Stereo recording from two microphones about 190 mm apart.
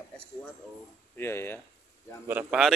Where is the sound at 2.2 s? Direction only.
10° right (ahead or behind).